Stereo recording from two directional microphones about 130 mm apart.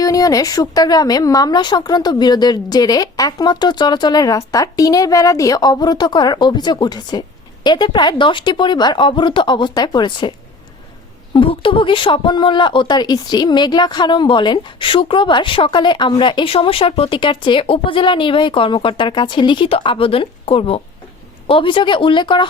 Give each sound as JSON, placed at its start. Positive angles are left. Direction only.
{"t": 0.0, "sound": "speech", "side_deg": 25}
{"t": 11.3, "sound": "speech", "side_deg": 40}